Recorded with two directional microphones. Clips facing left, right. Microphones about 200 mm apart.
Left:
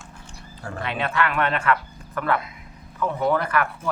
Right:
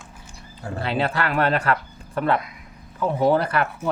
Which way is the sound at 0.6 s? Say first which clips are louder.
Right 4 dB; 30° right (ahead or behind).